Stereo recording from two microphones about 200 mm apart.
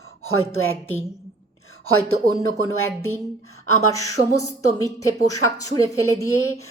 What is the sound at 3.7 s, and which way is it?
A woman's voice, 15° left (ahead or behind).